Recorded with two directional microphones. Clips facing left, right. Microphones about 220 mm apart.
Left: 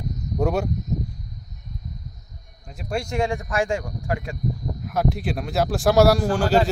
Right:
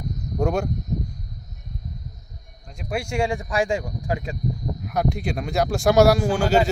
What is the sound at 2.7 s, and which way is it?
Speech, 5° right (ahead or behind).